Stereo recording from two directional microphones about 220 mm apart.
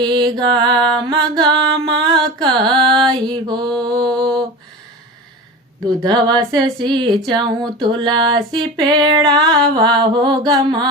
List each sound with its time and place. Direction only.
0.0 s music: 20° right (ahead or behind)
1.0 s mantra: 20° right (ahead or behind)
3.2 s music: 20° right (ahead or behind)
3.7 s mantra: 5° left (ahead or behind)
6.0 s music: 20° right (ahead or behind)